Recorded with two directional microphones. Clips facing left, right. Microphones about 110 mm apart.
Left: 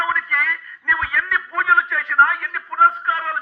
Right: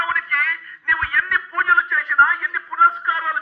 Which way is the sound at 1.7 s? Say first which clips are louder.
Left 1 dB; 85° left.